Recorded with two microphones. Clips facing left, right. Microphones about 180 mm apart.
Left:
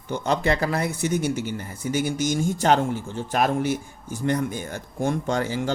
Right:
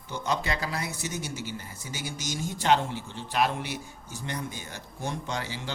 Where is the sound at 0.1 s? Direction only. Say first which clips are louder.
Left 7 dB; 55° left (ahead or behind).